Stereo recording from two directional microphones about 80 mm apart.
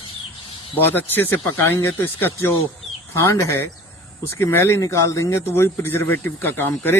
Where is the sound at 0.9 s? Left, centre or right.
Left.